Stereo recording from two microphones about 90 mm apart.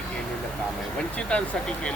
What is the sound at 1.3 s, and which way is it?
Speech, 10° left (ahead or behind).